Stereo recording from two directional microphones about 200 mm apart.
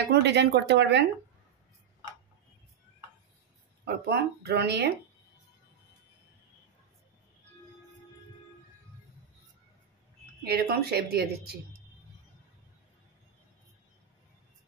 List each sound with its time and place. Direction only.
0.1 s speech: 60° right (ahead or behind)
3.8 s speech: 55° right (ahead or behind)
10.4 s speech: 50° right (ahead or behind)